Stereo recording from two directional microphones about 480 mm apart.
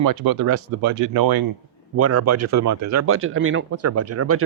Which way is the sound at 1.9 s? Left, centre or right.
Right.